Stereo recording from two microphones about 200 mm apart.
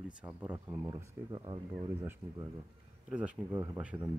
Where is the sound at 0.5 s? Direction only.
20° right (ahead or behind).